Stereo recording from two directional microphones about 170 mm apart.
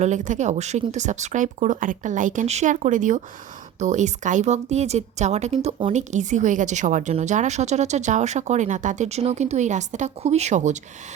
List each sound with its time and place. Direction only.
0.0 s speech: 45° right (ahead or behind)